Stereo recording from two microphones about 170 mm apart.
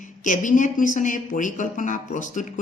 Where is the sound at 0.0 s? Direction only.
50° left (ahead or behind).